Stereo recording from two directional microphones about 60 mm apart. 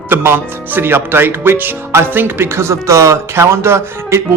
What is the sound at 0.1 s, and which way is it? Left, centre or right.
Speech, right.